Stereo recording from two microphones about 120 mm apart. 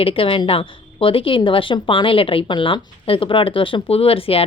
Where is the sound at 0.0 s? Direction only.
50° left (ahead or behind).